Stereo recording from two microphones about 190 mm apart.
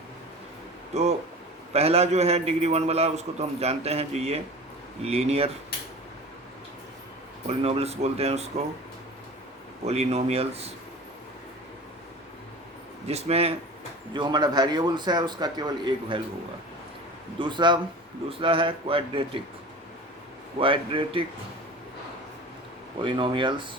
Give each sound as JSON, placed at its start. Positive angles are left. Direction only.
{"t": 0.9, "sound": "a man's voice", "side_deg": -35}
{"t": 7.4, "sound": "a man's voice", "side_deg": -35}
{"t": 9.8, "sound": "a man's voice", "side_deg": -35}
{"t": 13.1, "sound": "a man's voice", "side_deg": -35}
{"t": 17.4, "sound": "speech", "side_deg": -25}
{"t": 20.6, "sound": "speech", "side_deg": -30}
{"t": 23.0, "sound": "speech", "side_deg": -25}